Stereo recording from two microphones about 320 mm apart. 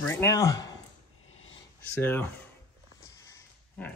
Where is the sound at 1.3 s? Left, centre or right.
Left.